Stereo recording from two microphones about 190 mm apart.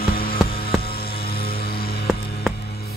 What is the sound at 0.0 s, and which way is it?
Music, 50° left (ahead or behind).